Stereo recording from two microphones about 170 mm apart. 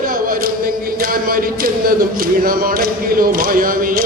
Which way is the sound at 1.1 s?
55° right (ahead or behind).